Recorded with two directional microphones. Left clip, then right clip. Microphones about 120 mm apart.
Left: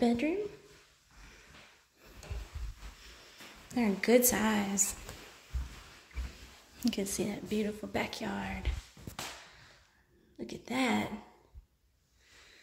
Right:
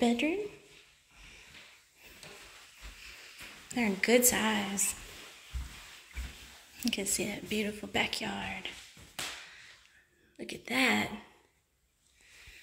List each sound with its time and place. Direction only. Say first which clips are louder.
0.0 s speech: right 1 dB; 10° left (ahead or behind)
3.6 s a woman's voice: right 1 dB; 20° left (ahead or behind)
6.8 s a woman's voice: right 1 dB; 30° left (ahead or behind)
7.6 s a woman's voice: right 3 dB; 10° left (ahead or behind); by 8.7 s 30° left (ahead or behind)
10.3 s speech: right 3 dB; 10° left (ahead or behind)